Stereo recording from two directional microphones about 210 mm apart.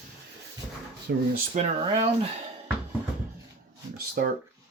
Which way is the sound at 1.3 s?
35° right (ahead or behind).